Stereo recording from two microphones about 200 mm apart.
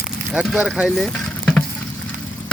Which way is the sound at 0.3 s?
5° right (ahead or behind).